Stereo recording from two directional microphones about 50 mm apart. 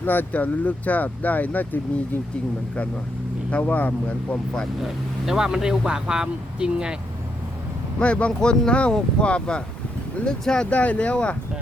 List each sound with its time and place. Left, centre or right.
0.0 s speech: left
3.5 s speech: left
4.8 s speech: centre
7.9 s speech: left
10.7 s speech: left